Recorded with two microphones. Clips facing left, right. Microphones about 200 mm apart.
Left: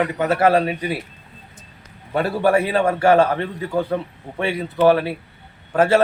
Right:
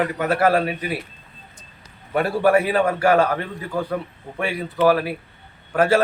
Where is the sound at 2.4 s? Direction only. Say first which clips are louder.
Even; 25° left (ahead or behind).